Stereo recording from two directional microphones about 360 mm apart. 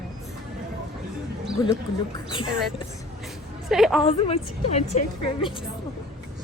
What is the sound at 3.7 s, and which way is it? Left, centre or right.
Speech, centre.